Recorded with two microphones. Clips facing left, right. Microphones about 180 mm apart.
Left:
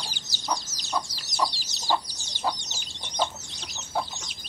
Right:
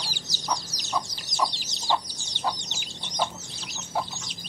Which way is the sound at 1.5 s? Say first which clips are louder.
Right 3 dB; 20° right (ahead or behind).